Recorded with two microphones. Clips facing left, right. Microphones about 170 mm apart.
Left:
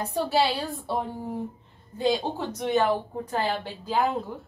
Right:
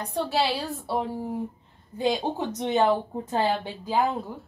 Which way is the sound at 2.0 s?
15° right (ahead or behind).